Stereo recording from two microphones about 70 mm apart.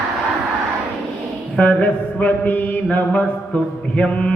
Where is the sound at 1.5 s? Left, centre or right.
Left.